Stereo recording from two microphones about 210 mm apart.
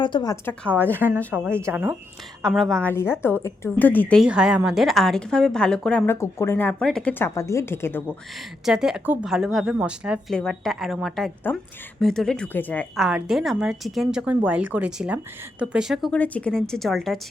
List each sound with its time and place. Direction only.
0.0 s a woman's voice: 20° left (ahead or behind)
0.9 s speech: 10° right (ahead or behind)
2.4 s speech: centre (ahead or behind)
8.6 s speech: centre (ahead or behind)
13.1 s speech: 5° right (ahead or behind)